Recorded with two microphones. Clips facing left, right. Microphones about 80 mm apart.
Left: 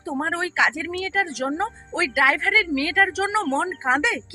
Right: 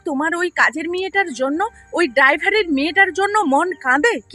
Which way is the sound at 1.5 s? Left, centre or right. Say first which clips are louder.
Right 5 dB; right.